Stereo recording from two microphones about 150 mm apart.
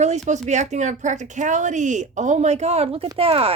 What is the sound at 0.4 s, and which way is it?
A woman's voice, 50° right (ahead or behind).